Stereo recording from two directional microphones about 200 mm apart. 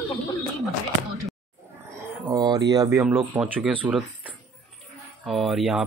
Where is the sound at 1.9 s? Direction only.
20° right (ahead or behind).